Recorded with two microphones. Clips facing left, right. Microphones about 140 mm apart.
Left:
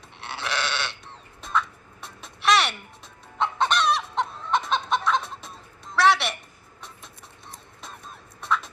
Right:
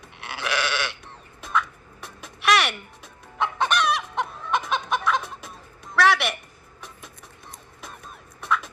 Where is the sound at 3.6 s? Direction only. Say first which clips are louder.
Even; 10° right (ahead or behind).